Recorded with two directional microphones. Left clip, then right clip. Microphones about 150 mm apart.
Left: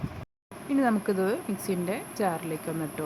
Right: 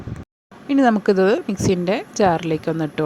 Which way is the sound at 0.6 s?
50° right (ahead or behind).